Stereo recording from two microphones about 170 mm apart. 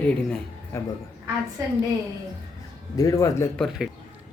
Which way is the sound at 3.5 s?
Centre (ahead or behind).